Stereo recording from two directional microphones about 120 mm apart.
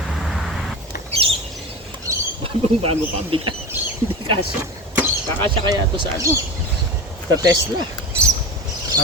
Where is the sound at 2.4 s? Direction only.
50° right (ahead or behind).